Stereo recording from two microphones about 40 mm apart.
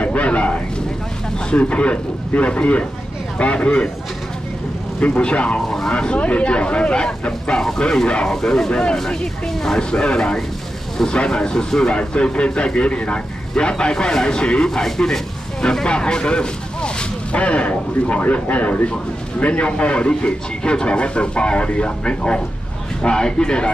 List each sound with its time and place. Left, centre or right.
0.0 s a sound: left
1.5 s a man's voice: left
5.0 s speech: left
5.7 s a man's voice: centre
11.9 s a man's voice: left
14.7 s a man's voice: centre